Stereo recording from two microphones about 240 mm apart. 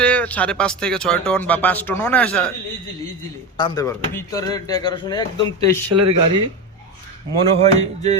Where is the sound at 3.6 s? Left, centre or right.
Centre.